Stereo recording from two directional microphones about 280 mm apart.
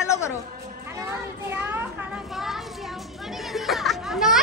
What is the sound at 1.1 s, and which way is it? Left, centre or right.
Speech, centre.